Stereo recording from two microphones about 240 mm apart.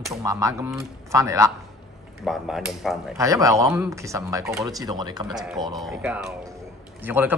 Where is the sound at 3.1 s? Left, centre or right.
Centre.